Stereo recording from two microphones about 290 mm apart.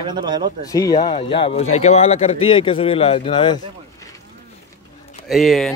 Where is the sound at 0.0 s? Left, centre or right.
Centre.